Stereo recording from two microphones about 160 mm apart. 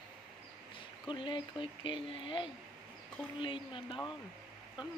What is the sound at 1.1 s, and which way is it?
Speech, 30° left (ahead or behind).